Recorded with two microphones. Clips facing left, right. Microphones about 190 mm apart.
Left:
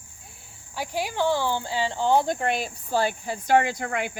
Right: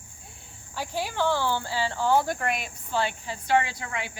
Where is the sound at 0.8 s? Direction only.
15° left (ahead or behind).